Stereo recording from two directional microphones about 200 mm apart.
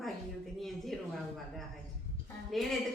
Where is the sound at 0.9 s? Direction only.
Centre (ahead or behind).